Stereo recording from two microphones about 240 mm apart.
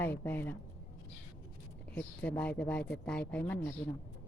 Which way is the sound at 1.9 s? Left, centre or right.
Centre.